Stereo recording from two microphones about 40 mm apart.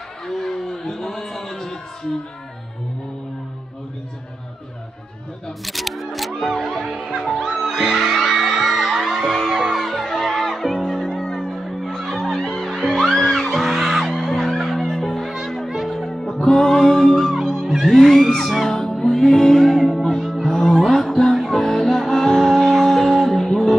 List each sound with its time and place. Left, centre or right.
0.3 s a sound: centre
5.7 s camera: centre
6.4 s music: centre
7.5 s music: centre
11.8 s music: centre
18.7 s music: centre